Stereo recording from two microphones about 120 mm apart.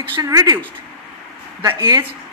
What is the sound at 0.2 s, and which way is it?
Speech, 30° right (ahead or behind).